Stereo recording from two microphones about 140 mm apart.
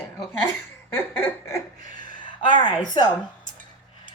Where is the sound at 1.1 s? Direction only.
15° left (ahead or behind).